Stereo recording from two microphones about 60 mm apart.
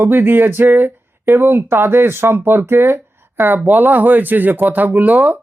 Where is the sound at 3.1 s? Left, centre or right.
Right.